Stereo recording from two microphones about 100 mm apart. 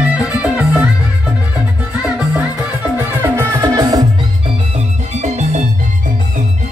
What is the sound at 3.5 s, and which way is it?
Music, 45° right (ahead or behind).